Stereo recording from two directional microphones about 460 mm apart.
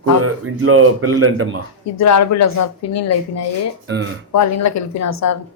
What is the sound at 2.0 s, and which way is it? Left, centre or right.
A woman's voice, left.